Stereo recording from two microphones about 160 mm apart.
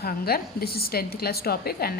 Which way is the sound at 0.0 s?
75° left (ahead or behind).